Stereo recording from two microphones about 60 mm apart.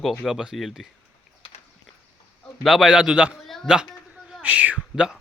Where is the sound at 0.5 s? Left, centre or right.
Centre.